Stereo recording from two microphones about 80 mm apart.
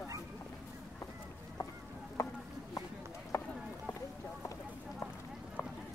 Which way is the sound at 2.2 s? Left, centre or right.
Left.